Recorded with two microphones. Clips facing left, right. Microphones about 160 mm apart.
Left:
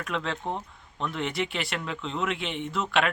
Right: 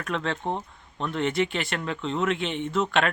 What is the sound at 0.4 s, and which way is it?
Speech, 15° right (ahead or behind).